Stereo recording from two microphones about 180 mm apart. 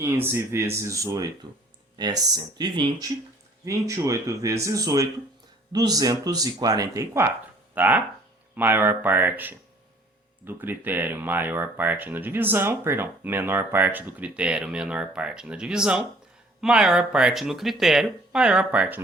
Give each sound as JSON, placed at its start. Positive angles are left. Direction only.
{"t": 0.0, "sound": "speech", "side_deg": -15}